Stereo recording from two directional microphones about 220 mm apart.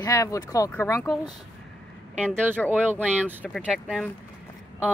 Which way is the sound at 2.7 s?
10° right (ahead or behind).